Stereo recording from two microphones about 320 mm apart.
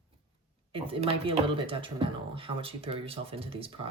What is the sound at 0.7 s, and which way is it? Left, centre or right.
Speech, centre.